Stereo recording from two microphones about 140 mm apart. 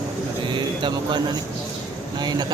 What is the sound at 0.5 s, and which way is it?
Speech, 35° right (ahead or behind).